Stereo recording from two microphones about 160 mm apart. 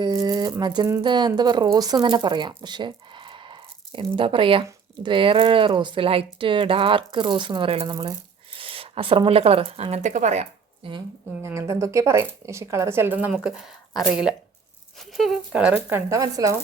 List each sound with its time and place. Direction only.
0.0 s rattle: 25° right (ahead or behind)
0.6 s speech: 25° right (ahead or behind); by 10.4 s 45° right (ahead or behind)
11.4 s speech: 15° right (ahead or behind)